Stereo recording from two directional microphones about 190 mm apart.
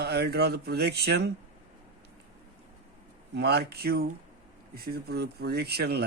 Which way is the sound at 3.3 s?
60° right (ahead or behind).